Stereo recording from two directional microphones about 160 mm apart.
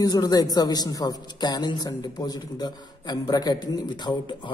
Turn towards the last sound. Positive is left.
turn(degrees=25)  # may be behind; listen again after turning